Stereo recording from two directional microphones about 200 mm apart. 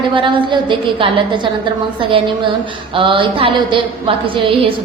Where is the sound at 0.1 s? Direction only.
25° right (ahead or behind).